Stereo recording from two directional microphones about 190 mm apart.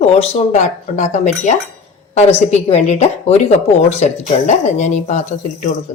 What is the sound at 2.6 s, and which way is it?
Speech, 35° left (ahead or behind).